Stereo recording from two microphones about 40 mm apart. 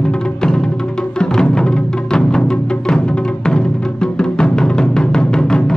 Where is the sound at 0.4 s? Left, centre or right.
Left.